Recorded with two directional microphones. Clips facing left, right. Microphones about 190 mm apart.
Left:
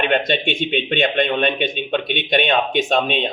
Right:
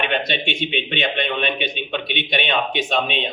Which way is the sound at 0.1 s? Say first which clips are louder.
Left 4 dB; 45° left (ahead or behind).